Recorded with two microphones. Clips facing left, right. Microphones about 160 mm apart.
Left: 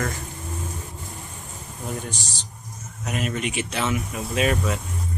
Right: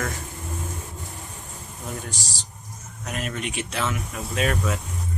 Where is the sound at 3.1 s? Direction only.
5° left (ahead or behind).